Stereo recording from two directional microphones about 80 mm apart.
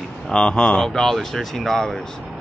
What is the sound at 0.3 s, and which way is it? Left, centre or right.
Speech, centre.